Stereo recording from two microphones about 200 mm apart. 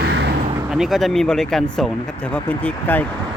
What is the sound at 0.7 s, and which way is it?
Speech, centre (ahead or behind).